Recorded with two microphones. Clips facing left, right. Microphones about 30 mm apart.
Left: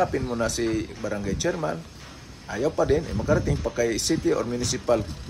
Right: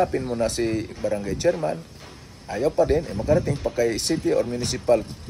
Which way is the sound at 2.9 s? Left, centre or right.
Right.